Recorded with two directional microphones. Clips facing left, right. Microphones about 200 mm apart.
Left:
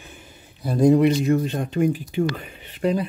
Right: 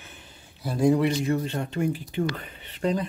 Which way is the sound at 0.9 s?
20° left (ahead or behind).